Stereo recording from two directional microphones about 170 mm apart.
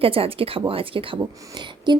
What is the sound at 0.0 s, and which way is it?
Speech, 35° right (ahead or behind).